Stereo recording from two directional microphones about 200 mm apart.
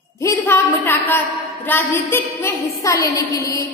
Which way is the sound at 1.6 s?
10° left (ahead or behind).